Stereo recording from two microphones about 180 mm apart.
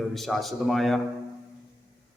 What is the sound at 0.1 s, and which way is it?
Speech, centre (ahead or behind).